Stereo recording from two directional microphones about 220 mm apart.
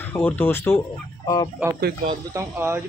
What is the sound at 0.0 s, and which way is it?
Speech, 10° left (ahead or behind).